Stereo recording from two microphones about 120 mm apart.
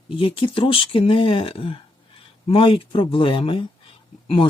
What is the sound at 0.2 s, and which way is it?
Speech, 50° left (ahead or behind).